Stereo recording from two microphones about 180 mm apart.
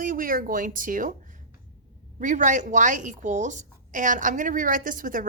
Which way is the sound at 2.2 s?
45° right (ahead or behind).